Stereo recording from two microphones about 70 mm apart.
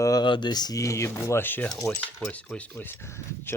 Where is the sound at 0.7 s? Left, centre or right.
Left.